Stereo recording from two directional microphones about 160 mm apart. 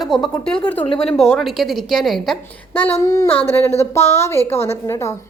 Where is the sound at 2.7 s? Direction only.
10° left (ahead or behind).